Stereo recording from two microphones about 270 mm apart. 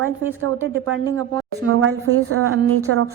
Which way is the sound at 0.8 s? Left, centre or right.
Right.